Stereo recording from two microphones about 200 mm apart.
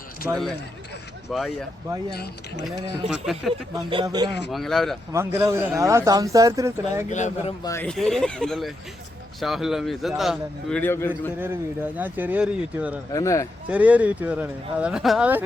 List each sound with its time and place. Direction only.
0.2 s speech: 10° right (ahead or behind)
1.3 s a man's voice: centre (ahead or behind)
2.1 s speech: 50° left (ahead or behind)
3.1 s a man's voice: centre (ahead or behind)
3.8 s speech: 20° right (ahead or behind)
4.4 s a man's voice: centre (ahead or behind)
5.1 s speech: 15° right (ahead or behind)
7.1 s speech: 35° left (ahead or behind)
7.6 s speech: 15° left (ahead or behind)
7.9 s a man's voice: centre (ahead or behind)
11.9 s speech: 10° right (ahead or behind)
13.1 s speech: 15° left (ahead or behind)
13.7 s speech: 5° right (ahead or behind)